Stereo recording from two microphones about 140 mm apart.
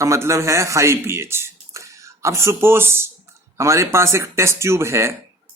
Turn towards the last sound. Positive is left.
turn(degrees=-20)  # may be behind; listen again after turning